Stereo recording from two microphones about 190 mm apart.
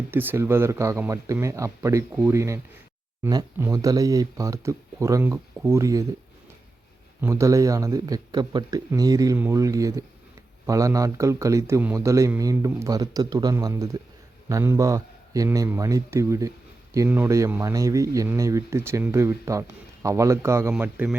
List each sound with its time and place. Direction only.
0.1 s speech: 10° right (ahead or behind)
7.2 s speech: 15° right (ahead or behind)